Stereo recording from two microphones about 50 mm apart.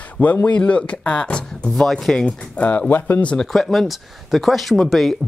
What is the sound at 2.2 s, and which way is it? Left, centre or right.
Speech, left.